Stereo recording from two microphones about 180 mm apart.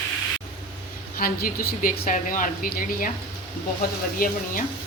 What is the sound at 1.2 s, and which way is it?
A woman's voice, 55° left (ahead or behind).